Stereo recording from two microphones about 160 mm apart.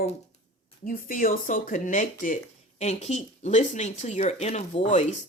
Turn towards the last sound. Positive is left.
turn(degrees=45)  # may be behind; listen again after turning